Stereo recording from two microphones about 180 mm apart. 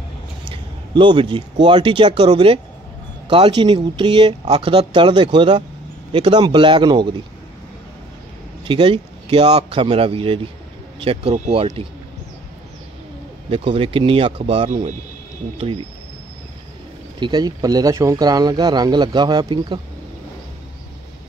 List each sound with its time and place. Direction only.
0.9 s speech: 25° right (ahead or behind)
8.6 s speech: 30° right (ahead or behind)
13.5 s speech: 30° right (ahead or behind)
17.2 s speech: 25° right (ahead or behind)